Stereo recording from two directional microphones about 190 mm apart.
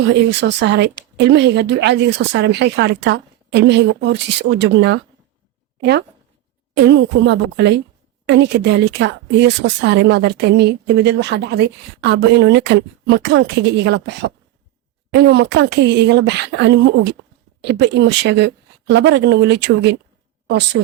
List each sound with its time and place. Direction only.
0.3 s a woman's voice: 65° right (ahead or behind)
6.8 s a woman's voice: 65° right (ahead or behind)